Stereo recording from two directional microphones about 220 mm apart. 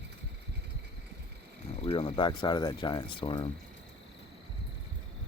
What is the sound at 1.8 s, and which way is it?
Speech, 25° left (ahead or behind).